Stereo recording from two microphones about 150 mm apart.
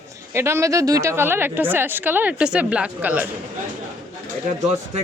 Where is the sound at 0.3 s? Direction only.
15° right (ahead or behind).